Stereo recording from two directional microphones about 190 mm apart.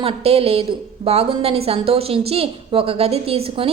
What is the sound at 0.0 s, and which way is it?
A woman's voice, 30° right (ahead or behind).